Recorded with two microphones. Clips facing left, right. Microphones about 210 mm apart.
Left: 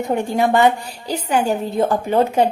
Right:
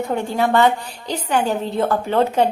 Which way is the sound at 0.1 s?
15° left (ahead or behind).